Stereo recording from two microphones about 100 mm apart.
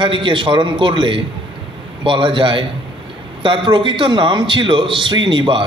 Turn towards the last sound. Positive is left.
turn(degrees=-55)  # may be behind; listen again after turning